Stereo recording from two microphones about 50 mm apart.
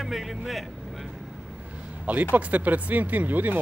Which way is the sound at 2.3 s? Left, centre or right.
Right.